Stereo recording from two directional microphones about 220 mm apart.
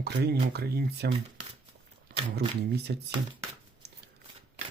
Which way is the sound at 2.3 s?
45° right (ahead or behind).